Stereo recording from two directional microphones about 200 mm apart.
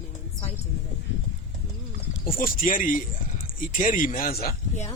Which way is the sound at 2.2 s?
45° left (ahead or behind).